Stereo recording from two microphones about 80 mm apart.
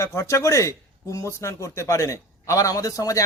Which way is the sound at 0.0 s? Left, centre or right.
Left.